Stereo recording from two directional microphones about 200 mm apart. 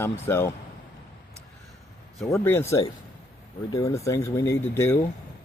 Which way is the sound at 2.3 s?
10° left (ahead or behind).